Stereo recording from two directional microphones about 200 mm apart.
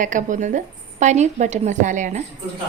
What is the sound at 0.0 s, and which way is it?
Speech, 40° right (ahead or behind).